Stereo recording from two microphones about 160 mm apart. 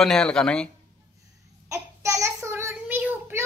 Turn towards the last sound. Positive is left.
turn(degrees=-10)  # may be behind; listen again after turning